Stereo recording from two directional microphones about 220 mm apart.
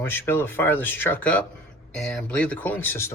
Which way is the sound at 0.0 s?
10° left (ahead or behind).